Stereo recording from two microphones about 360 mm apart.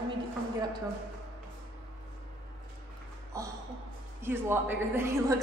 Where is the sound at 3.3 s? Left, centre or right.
Centre.